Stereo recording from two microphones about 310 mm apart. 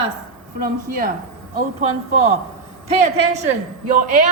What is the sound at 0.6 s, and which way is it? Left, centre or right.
Speech, right.